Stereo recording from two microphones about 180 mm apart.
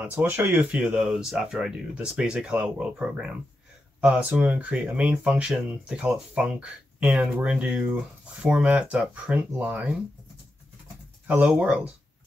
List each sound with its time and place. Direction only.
0.0 s speech: 10° right (ahead or behind)
11.2 s speech: 5° right (ahead or behind)